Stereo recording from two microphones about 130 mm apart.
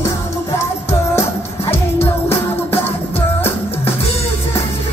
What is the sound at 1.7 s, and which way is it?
Music, 15° left (ahead or behind).